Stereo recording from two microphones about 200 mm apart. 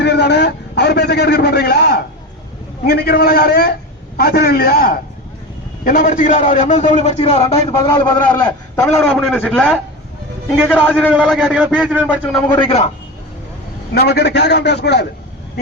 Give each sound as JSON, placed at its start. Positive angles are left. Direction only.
{"t": 0.0, "sound": "a sound", "side_deg": 55}
{"t": 2.8, "sound": "a man's voice", "side_deg": 50}
{"t": 8.4, "sound": "a man's voice", "side_deg": 15}
{"t": 9.0, "sound": "a man's voice", "side_deg": 0}
{"t": 10.7, "sound": "a man's voice", "side_deg": 10}
{"t": 11.1, "sound": "a man's voice", "side_deg": 0}
{"t": 12.1, "sound": "a man's voice", "side_deg": 10}
{"t": 12.5, "sound": "a man's voice", "side_deg": 30}
{"t": 13.9, "sound": "a man's voice", "side_deg": 55}